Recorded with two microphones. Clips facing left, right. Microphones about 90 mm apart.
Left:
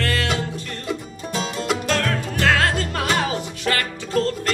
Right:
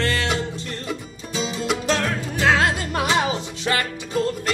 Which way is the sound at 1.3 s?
55° left (ahead or behind).